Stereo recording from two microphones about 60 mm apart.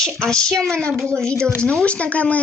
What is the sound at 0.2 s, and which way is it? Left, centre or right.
Speech, centre.